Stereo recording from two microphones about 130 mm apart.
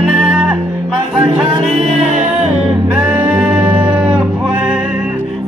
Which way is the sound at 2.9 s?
10° right (ahead or behind).